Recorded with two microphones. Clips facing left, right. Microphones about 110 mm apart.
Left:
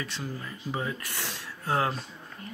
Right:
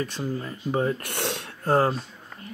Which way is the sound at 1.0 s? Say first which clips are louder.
Right 8 dB; 65° right (ahead or behind).